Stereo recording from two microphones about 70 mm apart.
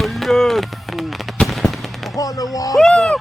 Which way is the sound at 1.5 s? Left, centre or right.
Centre.